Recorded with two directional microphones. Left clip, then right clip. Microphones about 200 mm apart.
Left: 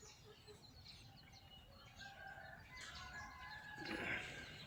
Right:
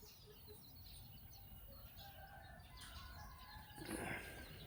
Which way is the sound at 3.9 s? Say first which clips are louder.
Left 3 dB; 20° right (ahead or behind).